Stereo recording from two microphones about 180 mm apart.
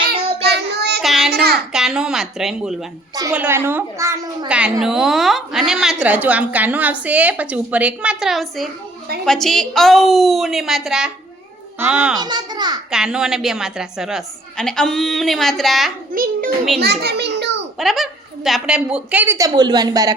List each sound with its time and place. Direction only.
0.4 s child singing: 65° right (ahead or behind)
1.0 s child singing: centre (ahead or behind)
1.3 s child singing: 60° right (ahead or behind)
1.7 s a woman's voice: 5° right (ahead or behind)
4.4 s a woman's voice: 5° right (ahead or behind)
12.2 s a child's voice: 25° right (ahead or behind)
12.9 s a woman's voice: 5° right (ahead or behind)
16.1 s a child's voice: 50° right (ahead or behind)
16.7 s a child's voice: 65° right (ahead or behind)
17.7 s speech: centre (ahead or behind); by 20.1 s 20° right (ahead or behind)